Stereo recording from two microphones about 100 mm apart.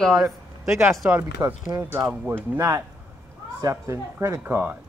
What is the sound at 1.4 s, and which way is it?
Speech, 30° right (ahead or behind).